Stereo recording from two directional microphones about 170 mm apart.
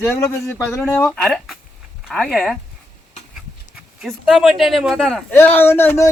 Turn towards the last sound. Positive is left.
turn(degrees=15)  # may be behind; listen again after turning